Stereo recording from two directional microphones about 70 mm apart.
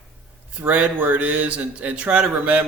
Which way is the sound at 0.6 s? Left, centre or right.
Right.